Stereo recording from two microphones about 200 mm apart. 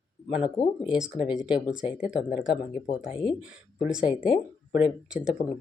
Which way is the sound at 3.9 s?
5° right (ahead or behind).